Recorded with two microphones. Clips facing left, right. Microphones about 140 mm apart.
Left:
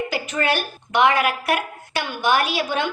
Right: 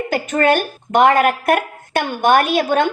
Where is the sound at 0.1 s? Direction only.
50° right (ahead or behind).